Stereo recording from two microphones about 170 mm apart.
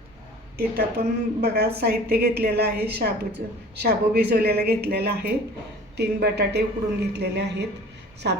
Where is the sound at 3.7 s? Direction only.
70° right (ahead or behind).